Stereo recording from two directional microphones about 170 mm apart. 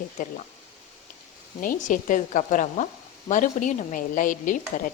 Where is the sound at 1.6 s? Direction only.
50° left (ahead or behind).